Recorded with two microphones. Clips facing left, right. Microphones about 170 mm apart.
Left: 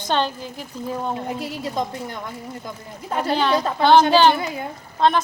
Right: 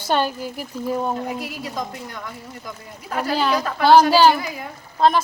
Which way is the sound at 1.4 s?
25° left (ahead or behind).